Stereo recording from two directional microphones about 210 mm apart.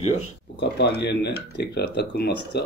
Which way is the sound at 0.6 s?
50° left (ahead or behind).